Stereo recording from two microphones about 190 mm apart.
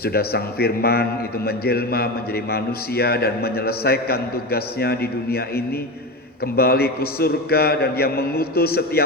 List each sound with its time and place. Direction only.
0.0 s a man's voice: 55° left (ahead or behind)